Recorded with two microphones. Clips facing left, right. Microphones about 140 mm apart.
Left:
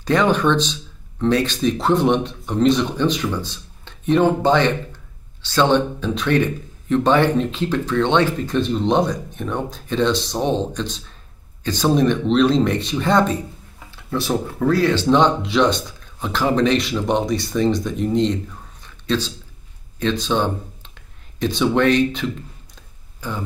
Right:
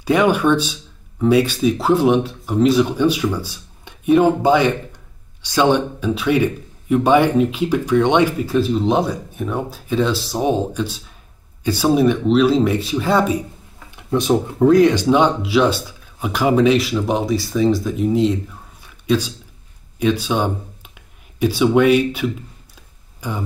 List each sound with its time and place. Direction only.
0.0 s speech: 10° right (ahead or behind)
13.8 s speech: 20° right (ahead or behind)